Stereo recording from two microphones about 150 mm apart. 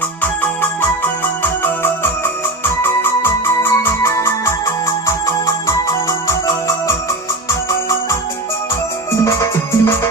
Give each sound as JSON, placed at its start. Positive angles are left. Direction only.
{"t": 0.2, "sound": "music", "side_deg": 15}
{"t": 9.2, "sound": "music", "side_deg": 20}